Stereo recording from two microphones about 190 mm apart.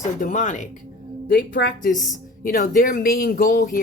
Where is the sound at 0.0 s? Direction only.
40° left (ahead or behind).